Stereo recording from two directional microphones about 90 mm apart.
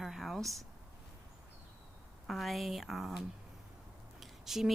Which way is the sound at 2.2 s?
Centre (ahead or behind).